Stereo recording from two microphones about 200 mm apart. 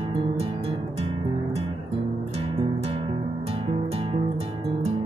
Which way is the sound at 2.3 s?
30° right (ahead or behind).